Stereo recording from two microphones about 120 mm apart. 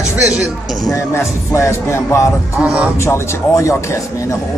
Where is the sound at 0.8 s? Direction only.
25° left (ahead or behind).